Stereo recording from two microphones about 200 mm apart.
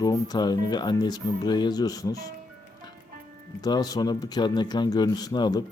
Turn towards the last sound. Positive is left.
turn(degrees=20)  # may be behind; listen again after turning